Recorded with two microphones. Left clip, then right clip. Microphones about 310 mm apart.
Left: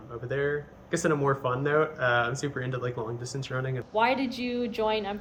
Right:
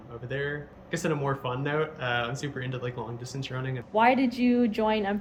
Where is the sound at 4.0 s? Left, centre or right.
Right.